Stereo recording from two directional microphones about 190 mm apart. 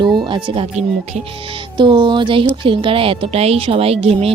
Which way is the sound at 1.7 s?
25° right (ahead or behind).